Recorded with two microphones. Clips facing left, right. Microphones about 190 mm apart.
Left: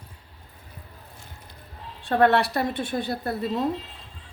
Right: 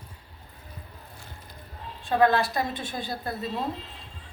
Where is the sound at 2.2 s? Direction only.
70° left (ahead or behind).